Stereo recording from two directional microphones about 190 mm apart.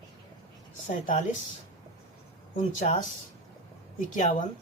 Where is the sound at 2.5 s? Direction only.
40° left (ahead or behind).